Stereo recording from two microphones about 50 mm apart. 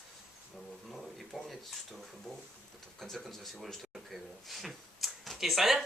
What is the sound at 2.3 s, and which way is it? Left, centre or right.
Speech, centre.